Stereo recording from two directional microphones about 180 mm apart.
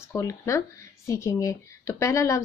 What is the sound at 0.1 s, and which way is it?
A woman's voice, 15° left (ahead or behind).